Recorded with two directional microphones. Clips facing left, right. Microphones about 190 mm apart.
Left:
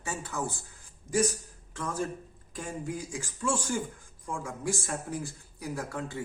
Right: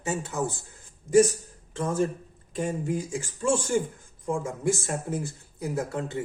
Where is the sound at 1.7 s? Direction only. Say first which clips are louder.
Right 7 dB; 25° right (ahead or behind).